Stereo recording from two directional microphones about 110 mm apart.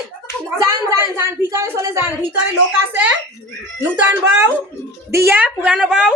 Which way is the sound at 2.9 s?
15° right (ahead or behind).